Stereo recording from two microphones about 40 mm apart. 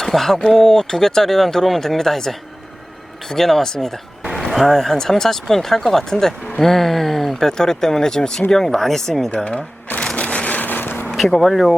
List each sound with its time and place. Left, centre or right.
0.0 s speech: centre
4.3 s a sound: centre
4.9 s speech: centre
9.3 s speech: left
10.2 s vehicle: left
10.6 s a sound: left
11.3 s speech: centre